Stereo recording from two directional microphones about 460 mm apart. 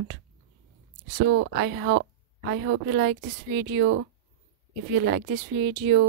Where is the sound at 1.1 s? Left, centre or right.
Right.